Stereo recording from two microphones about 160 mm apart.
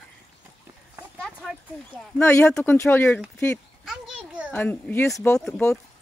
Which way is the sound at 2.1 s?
15° left (ahead or behind).